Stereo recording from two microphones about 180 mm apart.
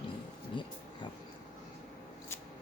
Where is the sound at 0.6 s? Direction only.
25° left (ahead or behind).